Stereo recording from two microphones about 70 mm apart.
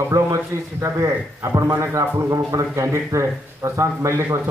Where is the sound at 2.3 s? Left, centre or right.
Right.